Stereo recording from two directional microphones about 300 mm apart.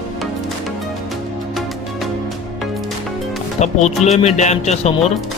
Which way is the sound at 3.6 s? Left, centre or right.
Left.